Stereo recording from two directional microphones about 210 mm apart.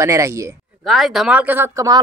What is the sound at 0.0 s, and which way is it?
Speech, 15° right (ahead or behind).